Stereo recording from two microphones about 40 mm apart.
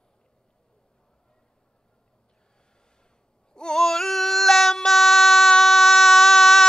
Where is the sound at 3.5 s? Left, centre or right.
Centre.